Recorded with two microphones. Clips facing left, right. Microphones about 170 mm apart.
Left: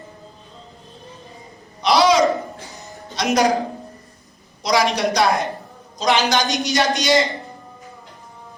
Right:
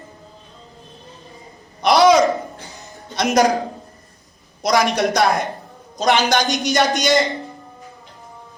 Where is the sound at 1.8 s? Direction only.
50° right (ahead or behind).